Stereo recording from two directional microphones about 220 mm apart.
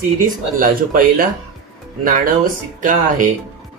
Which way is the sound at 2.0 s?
40° right (ahead or behind).